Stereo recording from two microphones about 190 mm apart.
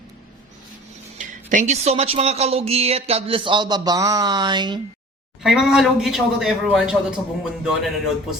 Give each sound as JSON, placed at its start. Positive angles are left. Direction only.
{"t": 1.2, "sound": "speech", "side_deg": -40}
{"t": 5.4, "sound": "a man's voice", "side_deg": -5}